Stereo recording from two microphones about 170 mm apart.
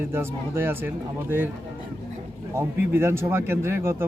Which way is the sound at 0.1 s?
15° right (ahead or behind).